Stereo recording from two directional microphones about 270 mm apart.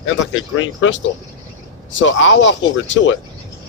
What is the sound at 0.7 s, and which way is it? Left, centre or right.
Speech, left.